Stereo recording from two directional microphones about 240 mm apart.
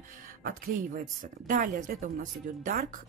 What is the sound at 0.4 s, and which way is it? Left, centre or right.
Speech, right.